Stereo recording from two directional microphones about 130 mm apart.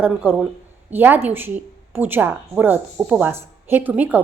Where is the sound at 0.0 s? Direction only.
15° right (ahead or behind).